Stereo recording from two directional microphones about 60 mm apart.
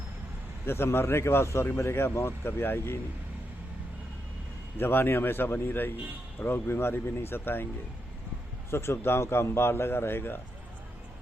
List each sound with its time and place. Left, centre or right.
0.6 s a man's voice: left
4.8 s a man's voice: left
8.7 s a man's voice: left